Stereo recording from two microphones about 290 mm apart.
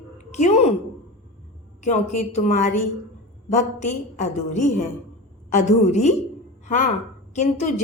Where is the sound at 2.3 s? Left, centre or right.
Left.